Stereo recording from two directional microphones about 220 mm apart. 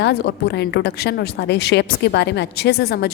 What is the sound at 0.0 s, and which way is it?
A woman's voice, 50° left (ahead or behind).